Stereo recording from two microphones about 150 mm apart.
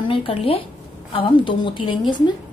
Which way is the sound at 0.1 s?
40° left (ahead or behind).